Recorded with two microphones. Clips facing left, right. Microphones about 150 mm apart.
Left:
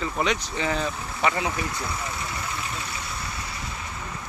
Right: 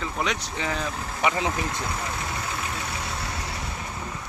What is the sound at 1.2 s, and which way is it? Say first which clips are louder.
Speech: even; 15° right (ahead or behind).